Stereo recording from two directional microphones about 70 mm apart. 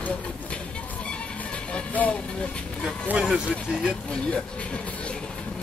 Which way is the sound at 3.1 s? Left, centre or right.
Centre.